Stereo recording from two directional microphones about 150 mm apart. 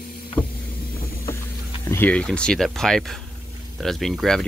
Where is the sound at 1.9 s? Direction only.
10° left (ahead or behind).